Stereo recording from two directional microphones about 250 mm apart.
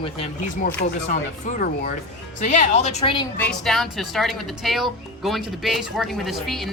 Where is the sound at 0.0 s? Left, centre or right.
Left.